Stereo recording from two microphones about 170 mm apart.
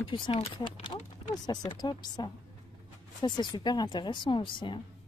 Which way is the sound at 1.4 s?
25° left (ahead or behind).